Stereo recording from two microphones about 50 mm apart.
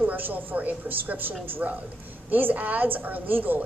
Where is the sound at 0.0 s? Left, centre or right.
Right.